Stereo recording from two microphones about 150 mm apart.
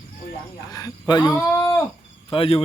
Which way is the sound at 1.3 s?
15° left (ahead or behind).